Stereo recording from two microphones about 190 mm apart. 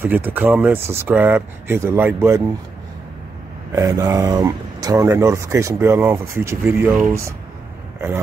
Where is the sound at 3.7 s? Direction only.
15° right (ahead or behind).